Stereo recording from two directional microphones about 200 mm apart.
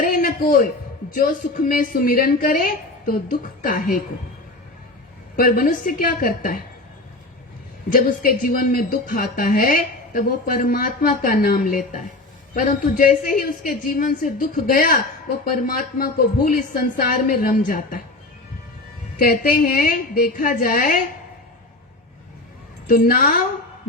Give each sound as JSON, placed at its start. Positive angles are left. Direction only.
{"t": 0.0, "sound": "a sound", "side_deg": 45}
{"t": 1.1, "sound": "a woman's voice", "side_deg": 45}
{"t": 5.4, "sound": "a woman's voice", "side_deg": 45}
{"t": 7.9, "sound": "a woman's voice", "side_deg": 45}
{"t": 19.2, "sound": "a woman's voice", "side_deg": 45}
{"t": 22.9, "sound": "a woman's voice", "side_deg": 45}